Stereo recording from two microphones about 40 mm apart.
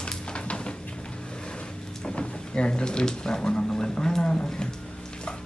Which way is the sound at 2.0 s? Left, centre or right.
Left.